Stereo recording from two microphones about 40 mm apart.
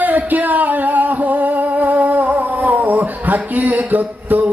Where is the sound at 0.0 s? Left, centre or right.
Right.